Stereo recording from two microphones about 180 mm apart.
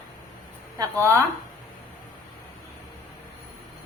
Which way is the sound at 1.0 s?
15° right (ahead or behind).